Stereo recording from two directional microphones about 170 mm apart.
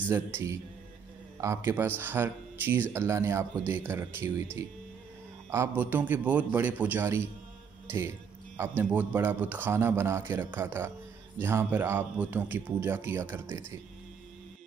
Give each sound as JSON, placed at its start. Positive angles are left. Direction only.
{"t": 0.0, "sound": "speech", "side_deg": -15}
{"t": 5.5, "sound": "speech", "side_deg": -10}
{"t": 8.5, "sound": "speech", "side_deg": -10}